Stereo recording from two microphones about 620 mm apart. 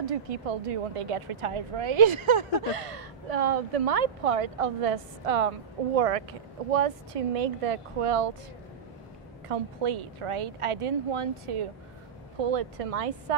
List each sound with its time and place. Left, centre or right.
0.3 s a woman's voice: right
9.5 s a woman's voice: right